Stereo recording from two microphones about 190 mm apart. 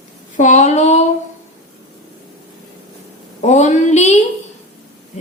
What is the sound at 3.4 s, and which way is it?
Child singing, 40° left (ahead or behind).